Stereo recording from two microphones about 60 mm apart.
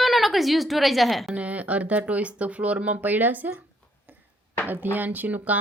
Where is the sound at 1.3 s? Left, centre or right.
Right.